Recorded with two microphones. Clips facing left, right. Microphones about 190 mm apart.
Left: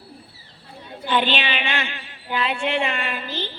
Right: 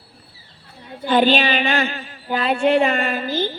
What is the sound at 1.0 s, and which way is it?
A woman's voice, 40° right (ahead or behind).